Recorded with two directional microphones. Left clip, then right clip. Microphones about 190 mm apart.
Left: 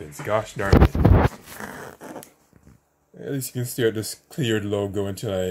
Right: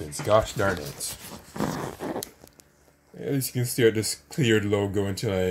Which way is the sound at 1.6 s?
35° left (ahead or behind).